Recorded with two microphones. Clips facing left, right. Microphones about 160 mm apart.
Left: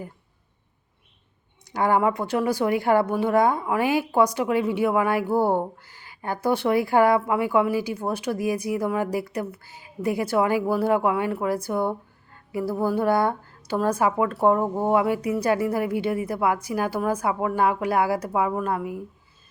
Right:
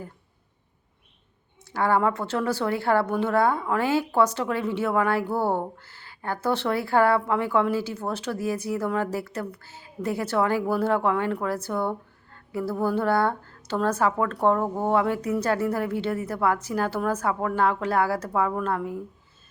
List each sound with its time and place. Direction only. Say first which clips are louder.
1.7 s a woman's voice: left 2 dB; 15° left (ahead or behind)